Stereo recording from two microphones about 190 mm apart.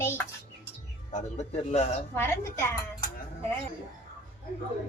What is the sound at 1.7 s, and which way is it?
Speech, 35° left (ahead or behind).